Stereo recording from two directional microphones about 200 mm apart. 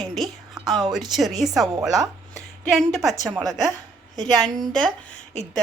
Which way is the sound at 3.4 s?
15° right (ahead or behind).